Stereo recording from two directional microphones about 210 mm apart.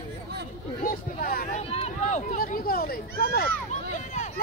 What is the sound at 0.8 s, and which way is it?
Speech, 40° left (ahead or behind).